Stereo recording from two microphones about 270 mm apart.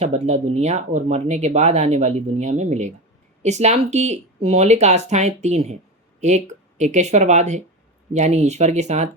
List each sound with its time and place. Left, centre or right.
0.0 s speech: right